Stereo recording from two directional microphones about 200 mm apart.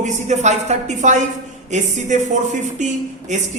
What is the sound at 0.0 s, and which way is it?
A woman's voice, 35° right (ahead or behind).